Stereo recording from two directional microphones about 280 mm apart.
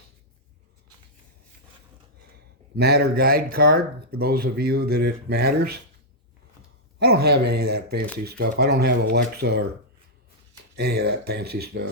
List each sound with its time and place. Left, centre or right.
2.7 s speech: right
7.0 s speech: right
10.8 s speech: right